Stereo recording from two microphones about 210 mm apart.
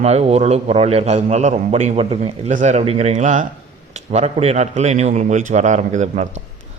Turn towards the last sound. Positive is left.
turn(degrees=-35)  # may be behind; listen again after turning